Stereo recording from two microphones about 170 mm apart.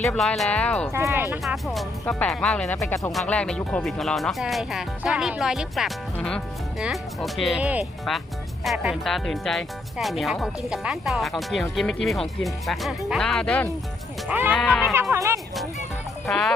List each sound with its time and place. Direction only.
0.0 s speech: 5° left (ahead or behind)
0.9 s speech: 15° right (ahead or behind)
1.4 s speech: centre (ahead or behind)
2.7 s speech: 15° left (ahead or behind)
3.1 s speech: 5° left (ahead or behind)
14.3 s speech: 10° right (ahead or behind)
14.5 s speech: 5° left (ahead or behind)
15.1 s speech: 15° right (ahead or behind)
16.3 s speech: 5° left (ahead or behind)